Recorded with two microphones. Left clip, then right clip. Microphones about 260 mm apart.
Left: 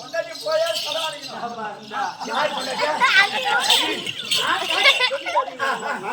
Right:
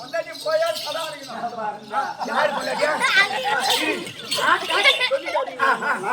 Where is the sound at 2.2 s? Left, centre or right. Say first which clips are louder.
Right 2 dB; centre.